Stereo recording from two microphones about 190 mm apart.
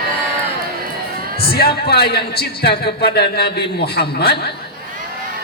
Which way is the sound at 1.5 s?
55° left (ahead or behind).